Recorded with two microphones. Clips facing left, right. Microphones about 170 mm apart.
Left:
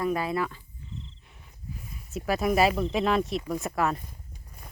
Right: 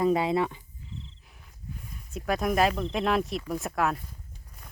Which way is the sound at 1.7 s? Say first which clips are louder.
Left 3 dB; 5° left (ahead or behind).